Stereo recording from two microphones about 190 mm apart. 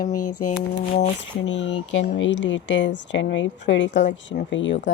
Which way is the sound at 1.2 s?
75° left (ahead or behind).